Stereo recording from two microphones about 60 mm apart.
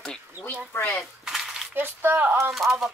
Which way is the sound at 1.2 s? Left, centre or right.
Centre.